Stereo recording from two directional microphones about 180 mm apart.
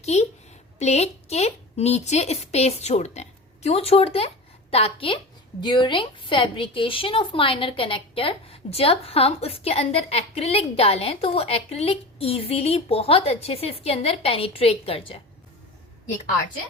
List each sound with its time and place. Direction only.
0.0 s a woman's voice: 40° left (ahead or behind)